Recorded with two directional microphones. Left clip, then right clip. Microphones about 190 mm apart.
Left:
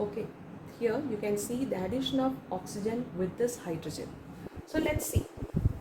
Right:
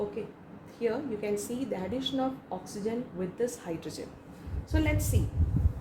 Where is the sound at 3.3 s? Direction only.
35° right (ahead or behind).